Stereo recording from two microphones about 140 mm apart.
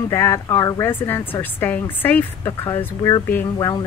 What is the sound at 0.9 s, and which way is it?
A woman's voice, 15° left (ahead or behind).